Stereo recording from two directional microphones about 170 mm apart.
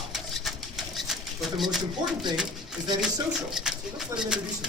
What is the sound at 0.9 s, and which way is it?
Pigeon, centre (ahead or behind).